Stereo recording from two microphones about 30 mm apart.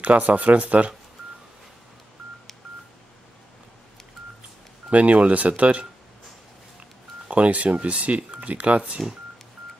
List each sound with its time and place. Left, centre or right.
0.0 s speech: right
4.8 s speech: right
7.2 s speech: right